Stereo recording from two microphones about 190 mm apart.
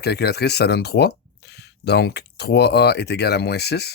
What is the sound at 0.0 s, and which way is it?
Speech, 60° left (ahead or behind).